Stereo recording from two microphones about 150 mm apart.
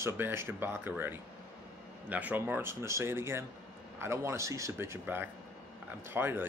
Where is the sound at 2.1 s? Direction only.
10° right (ahead or behind).